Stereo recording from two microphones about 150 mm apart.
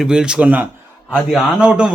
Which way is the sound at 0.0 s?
5° right (ahead or behind).